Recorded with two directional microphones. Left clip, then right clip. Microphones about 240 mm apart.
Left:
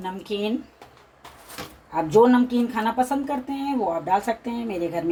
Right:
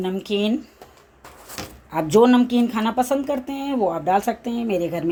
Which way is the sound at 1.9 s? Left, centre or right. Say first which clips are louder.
Right 1 dB; right.